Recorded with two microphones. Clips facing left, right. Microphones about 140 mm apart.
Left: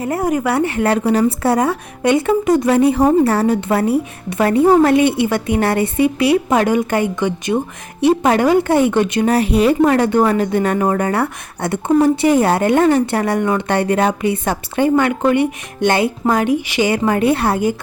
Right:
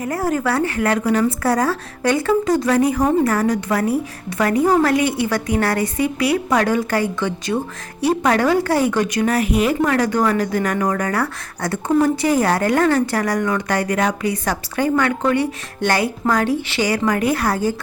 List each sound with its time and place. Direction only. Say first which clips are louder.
0.0 s speech: left 3 dB; 25° left (ahead or behind)